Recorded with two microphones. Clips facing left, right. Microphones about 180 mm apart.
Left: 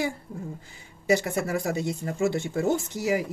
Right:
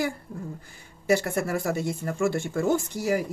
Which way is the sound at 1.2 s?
20° left (ahead or behind).